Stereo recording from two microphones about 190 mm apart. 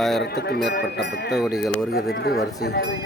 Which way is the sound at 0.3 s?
60° left (ahead or behind).